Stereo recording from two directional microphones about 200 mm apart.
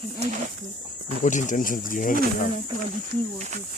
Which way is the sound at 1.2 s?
40° left (ahead or behind).